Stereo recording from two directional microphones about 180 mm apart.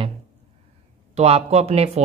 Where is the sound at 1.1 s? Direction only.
35° right (ahead or behind).